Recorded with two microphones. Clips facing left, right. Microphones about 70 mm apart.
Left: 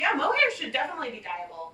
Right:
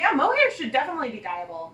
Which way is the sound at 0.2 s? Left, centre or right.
Right.